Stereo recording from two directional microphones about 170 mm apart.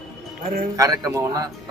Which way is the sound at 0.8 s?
20° right (ahead or behind).